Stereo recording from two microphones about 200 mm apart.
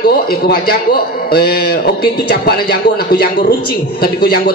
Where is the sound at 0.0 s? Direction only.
50° left (ahead or behind).